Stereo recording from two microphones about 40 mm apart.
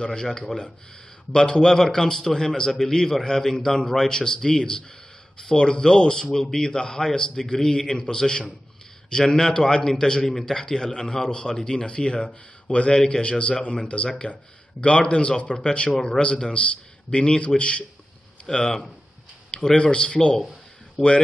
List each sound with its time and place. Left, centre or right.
0.0 s a man's voice: centre
16.2 s a man's voice: centre
17.1 s a man's voice: left